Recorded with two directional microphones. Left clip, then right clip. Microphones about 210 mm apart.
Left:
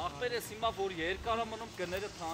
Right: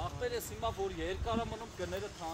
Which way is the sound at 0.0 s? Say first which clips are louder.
Left 2 dB; 5° right (ahead or behind).